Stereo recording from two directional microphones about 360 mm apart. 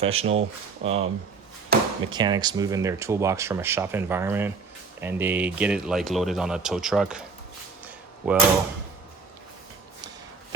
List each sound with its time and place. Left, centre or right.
0.0 s speech: centre
1.7 s chop: right
2.0 s speech: centre
7.9 s a sound: centre